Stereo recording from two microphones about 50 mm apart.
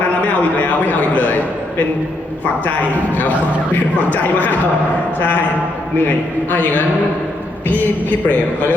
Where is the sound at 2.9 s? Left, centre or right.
Left.